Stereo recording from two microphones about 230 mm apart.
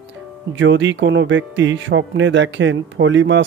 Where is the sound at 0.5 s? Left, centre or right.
Right.